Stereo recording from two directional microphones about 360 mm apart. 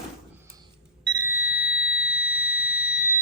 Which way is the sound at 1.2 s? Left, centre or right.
Centre.